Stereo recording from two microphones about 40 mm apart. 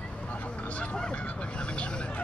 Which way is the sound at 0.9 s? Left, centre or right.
Left.